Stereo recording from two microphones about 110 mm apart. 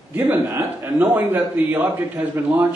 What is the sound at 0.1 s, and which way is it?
A man's voice, 15° right (ahead or behind).